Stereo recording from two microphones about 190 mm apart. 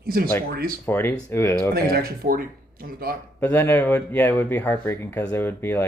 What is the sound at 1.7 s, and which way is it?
Speech, 55° right (ahead or behind).